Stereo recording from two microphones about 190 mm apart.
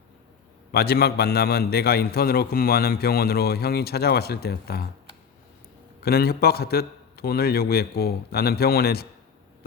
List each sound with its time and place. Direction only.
0.7 s a man's voice: 55° left (ahead or behind)
6.0 s a man's voice: 55° left (ahead or behind)